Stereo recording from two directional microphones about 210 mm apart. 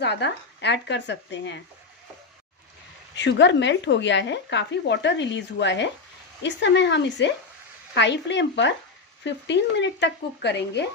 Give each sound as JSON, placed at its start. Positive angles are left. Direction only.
{"t": 0.0, "sound": "speech", "side_deg": 55}
{"t": 3.2, "sound": "speech", "side_deg": 55}